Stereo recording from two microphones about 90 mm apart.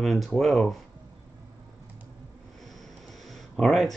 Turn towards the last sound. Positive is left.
turn(degrees=0)  # may be behind; listen again after turning